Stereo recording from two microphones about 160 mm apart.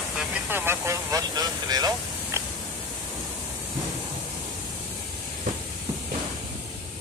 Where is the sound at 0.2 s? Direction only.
10° right (ahead or behind).